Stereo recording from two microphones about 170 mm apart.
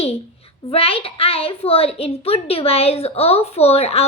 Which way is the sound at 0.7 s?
35° left (ahead or behind).